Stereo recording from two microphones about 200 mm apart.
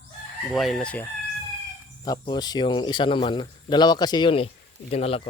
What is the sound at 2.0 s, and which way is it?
Speech, 20° left (ahead or behind).